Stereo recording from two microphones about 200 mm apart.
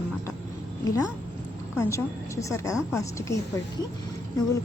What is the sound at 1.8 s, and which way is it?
A woman's voice, 15° left (ahead or behind).